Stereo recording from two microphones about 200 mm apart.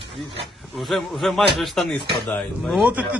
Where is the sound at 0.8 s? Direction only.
Centre (ahead or behind).